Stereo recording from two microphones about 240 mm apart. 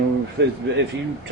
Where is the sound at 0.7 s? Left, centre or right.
Right.